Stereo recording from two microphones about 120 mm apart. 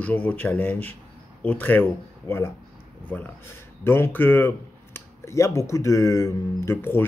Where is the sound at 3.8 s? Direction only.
20° left (ahead or behind).